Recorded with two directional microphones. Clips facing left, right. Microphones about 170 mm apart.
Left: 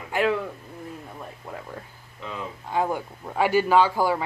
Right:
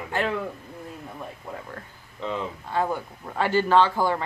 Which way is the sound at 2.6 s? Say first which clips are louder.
Left 2 dB; 15° left (ahead or behind).